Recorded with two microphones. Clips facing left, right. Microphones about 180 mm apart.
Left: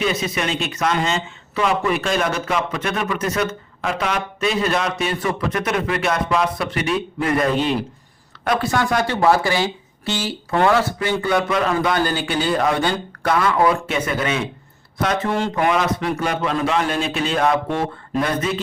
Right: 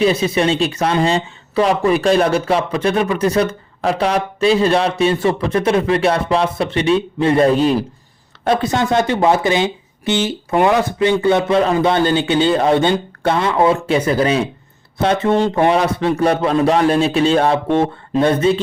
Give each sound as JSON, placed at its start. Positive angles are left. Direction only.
{"t": 0.0, "sound": "a man's voice", "side_deg": -30}
{"t": 8.4, "sound": "a man's voice", "side_deg": -20}